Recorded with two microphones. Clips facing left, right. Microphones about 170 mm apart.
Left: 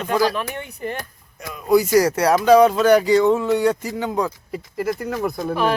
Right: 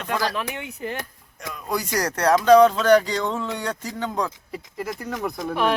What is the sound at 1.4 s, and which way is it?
Speech, 5° left (ahead or behind).